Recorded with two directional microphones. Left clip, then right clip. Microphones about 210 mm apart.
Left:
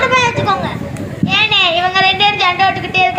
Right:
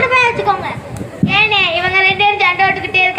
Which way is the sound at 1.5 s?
25° right (ahead or behind).